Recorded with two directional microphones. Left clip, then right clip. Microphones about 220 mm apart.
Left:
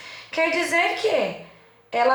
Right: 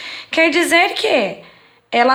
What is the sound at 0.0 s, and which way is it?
A woman's voice, 40° right (ahead or behind).